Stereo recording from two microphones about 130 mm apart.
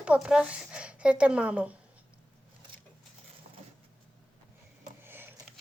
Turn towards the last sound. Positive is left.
turn(degrees=-15)  # may be behind; listen again after turning